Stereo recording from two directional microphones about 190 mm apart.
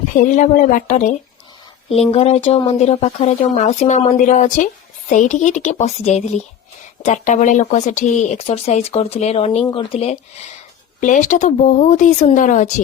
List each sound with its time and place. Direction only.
0.1 s speech: 45° left (ahead or behind)